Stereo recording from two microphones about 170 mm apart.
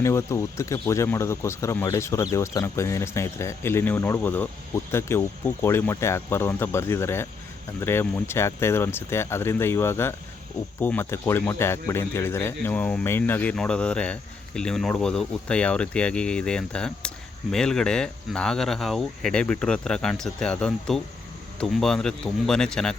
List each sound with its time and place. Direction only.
0.0 s speech: 15° left (ahead or behind)